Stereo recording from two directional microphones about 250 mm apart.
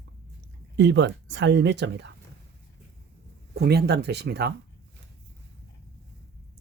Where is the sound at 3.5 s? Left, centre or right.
Right.